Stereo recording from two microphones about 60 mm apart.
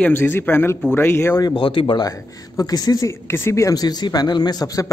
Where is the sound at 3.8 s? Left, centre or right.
Left.